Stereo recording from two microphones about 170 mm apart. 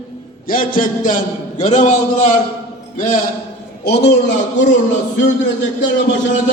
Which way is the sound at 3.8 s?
75° left (ahead or behind).